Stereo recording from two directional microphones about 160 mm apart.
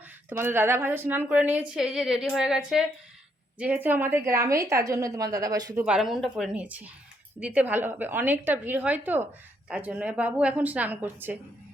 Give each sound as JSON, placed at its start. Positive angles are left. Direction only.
{"t": 0.3, "sound": "a woman's voice", "side_deg": -15}
{"t": 5.8, "sound": "a woman's voice", "side_deg": -5}